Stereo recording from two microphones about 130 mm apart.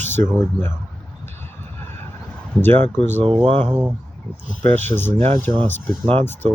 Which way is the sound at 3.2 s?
45° right (ahead or behind).